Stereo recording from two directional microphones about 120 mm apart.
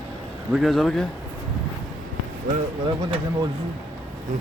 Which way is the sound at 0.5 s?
Centre (ahead or behind).